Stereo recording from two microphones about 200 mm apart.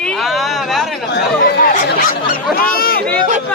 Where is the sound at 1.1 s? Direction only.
50° left (ahead or behind).